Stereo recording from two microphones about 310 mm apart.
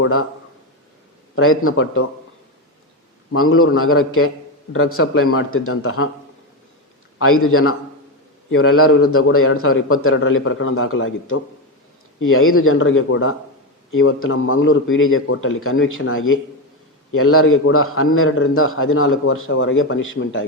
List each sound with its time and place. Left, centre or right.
0.0 s a man's voice: left
1.4 s a man's voice: left
3.3 s a man's voice: left
7.2 s a man's voice: left